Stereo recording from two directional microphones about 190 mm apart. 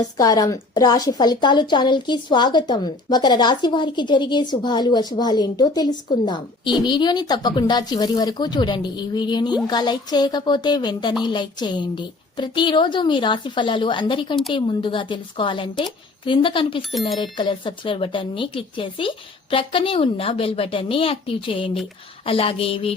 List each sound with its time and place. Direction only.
0.2 s a woman's voice: 20° left (ahead or behind)